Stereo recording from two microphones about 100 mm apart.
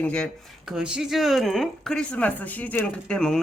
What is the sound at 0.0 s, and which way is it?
Speech, 10° left (ahead or behind).